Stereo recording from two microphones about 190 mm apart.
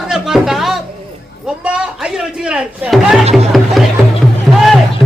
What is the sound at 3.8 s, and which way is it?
Speech, centre (ahead or behind).